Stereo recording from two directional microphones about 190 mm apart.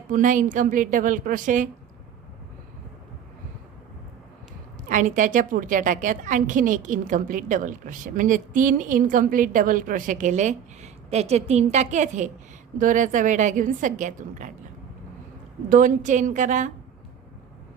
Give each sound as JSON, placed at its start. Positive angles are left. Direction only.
{"t": 0.1, "sound": "a woman's voice", "side_deg": -45}
{"t": 4.9, "sound": "a woman's voice", "side_deg": -45}
{"t": 15.7, "sound": "a woman's voice", "side_deg": -40}